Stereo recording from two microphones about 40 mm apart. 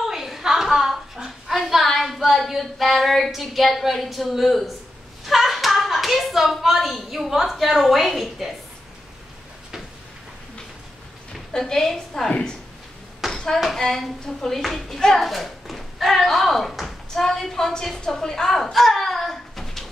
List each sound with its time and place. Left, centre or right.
0.0 s a sound: centre
1.9 s child singing: centre
5.2 s hands: centre
6.9 s a woman's voice: centre
11.5 s speech: centre
12.3 s speech: left
13.3 s a sound: centre
13.7 s a woman's voice: centre
17.9 s a sound: centre